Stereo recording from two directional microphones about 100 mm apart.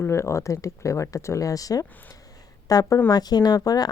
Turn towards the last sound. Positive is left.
turn(degrees=40)  # may be behind; listen again after turning